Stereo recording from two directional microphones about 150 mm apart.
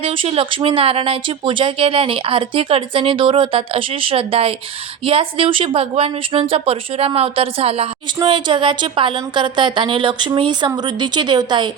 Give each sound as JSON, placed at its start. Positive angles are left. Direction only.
{"t": 0.0, "sound": "speech", "side_deg": -35}